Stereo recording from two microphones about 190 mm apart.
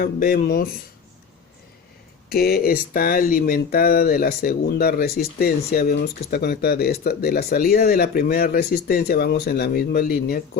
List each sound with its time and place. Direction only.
0.0 s speech: 50° left (ahead or behind)
2.3 s speech: 55° left (ahead or behind)